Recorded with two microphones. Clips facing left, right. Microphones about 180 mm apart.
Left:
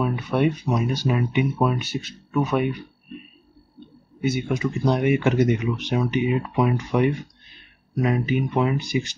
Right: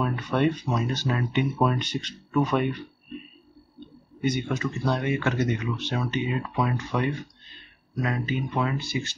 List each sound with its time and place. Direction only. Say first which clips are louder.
0.0 s speech: left 2 dB; 10° left (ahead or behind)
4.2 s speech: left 3 dB; 5° left (ahead or behind)